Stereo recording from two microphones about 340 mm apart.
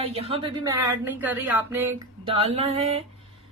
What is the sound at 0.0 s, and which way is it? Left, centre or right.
Speech, centre.